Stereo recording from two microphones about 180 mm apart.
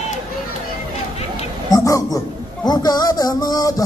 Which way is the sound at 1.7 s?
20° left (ahead or behind).